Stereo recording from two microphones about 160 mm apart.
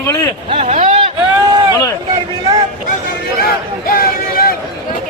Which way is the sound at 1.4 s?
25° right (ahead or behind).